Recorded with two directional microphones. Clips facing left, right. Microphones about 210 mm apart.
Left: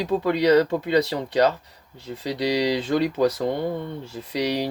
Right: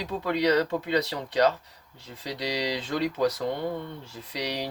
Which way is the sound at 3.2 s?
30° left (ahead or behind).